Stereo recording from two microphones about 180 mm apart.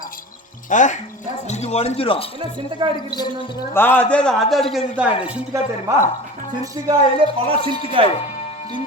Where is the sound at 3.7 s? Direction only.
10° left (ahead or behind); by 5.9 s 10° right (ahead or behind).